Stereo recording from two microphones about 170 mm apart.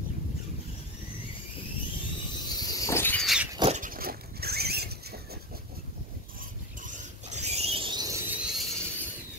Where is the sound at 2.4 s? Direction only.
25° left (ahead or behind).